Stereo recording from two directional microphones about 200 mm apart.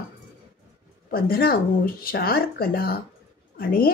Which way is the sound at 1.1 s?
50° left (ahead or behind).